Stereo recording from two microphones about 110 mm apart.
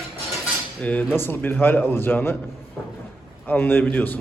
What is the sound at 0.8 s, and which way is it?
A man's voice, 10° left (ahead or behind).